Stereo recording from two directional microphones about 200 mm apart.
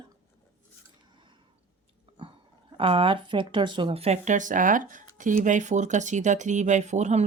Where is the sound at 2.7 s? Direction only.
25° right (ahead or behind).